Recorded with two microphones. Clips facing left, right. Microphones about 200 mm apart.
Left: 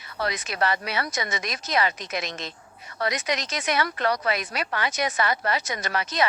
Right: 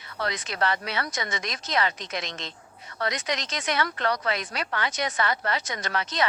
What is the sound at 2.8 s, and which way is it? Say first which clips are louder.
A woman's voice: left 2 dB; 15° left (ahead or behind).